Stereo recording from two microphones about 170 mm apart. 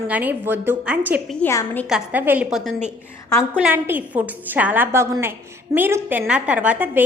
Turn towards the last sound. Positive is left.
turn(degrees=-10)  # may be behind; listen again after turning